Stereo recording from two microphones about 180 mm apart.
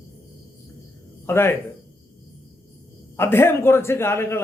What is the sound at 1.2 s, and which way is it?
Speech, 15° left (ahead or behind).